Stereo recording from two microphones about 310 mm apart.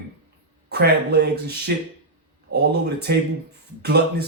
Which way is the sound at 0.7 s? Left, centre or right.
Right.